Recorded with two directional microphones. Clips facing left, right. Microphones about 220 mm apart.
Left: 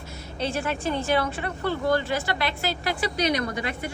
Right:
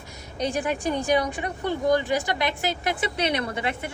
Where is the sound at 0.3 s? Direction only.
15° right (ahead or behind).